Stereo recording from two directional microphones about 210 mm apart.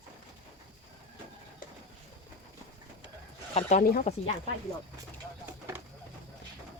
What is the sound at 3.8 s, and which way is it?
Speech, 45° left (ahead or behind).